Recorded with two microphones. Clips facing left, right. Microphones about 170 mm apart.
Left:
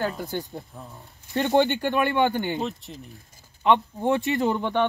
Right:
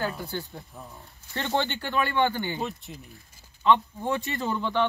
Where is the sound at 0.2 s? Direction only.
20° left (ahead or behind).